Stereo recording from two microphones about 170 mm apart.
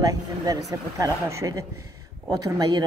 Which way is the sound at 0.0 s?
20° right (ahead or behind).